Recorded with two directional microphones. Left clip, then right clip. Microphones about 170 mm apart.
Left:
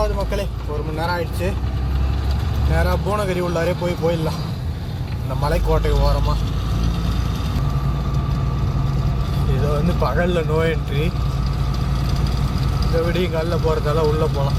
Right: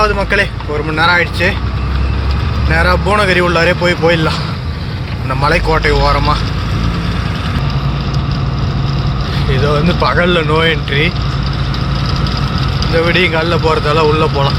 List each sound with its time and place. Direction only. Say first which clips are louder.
0.0 s speech: right 11 dB; centre (ahead or behind)
2.7 s speech: right 10 dB; centre (ahead or behind)
5.4 s speech: right 9 dB; centre (ahead or behind)
10.0 s speech: right 8 dB; centre (ahead or behind)
13.0 s speech: right 10 dB; centre (ahead or behind)